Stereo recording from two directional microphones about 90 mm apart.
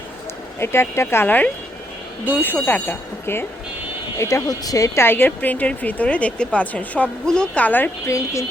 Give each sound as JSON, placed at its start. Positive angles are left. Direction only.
{"t": 0.6, "sound": "speech", "side_deg": 30}
{"t": 4.2, "sound": "speech", "side_deg": 35}
{"t": 5.0, "sound": "a woman's voice", "side_deg": 25}
{"t": 8.0, "sound": "speech", "side_deg": 35}